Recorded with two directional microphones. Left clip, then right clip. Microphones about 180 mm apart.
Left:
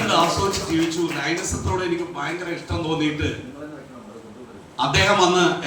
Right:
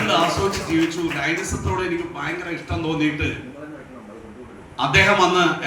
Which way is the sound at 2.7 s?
35° right (ahead or behind).